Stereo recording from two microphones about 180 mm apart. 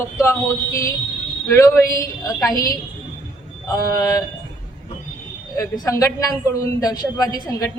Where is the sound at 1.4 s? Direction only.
15° left (ahead or behind).